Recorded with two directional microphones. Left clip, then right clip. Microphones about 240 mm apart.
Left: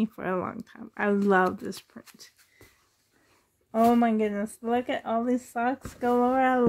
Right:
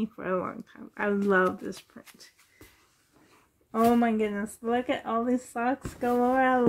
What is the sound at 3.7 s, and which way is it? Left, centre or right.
Speech, left.